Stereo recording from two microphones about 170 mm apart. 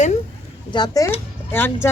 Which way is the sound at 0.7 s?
25° left (ahead or behind).